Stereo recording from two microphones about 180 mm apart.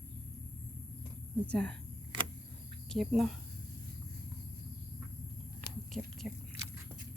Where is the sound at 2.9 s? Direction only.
Centre (ahead or behind).